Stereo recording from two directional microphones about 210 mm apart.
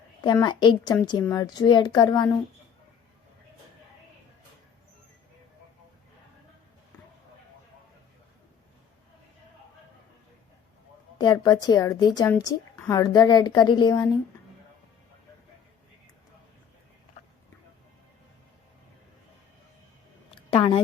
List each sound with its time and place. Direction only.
0.3 s a woman's voice: 20° left (ahead or behind)
11.2 s a woman's voice: 20° left (ahead or behind)
20.5 s speech: 25° left (ahead or behind)